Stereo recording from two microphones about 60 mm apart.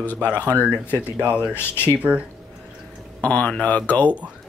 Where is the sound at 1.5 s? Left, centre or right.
Left.